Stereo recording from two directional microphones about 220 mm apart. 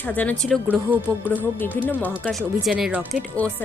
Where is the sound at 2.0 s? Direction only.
Centre (ahead or behind).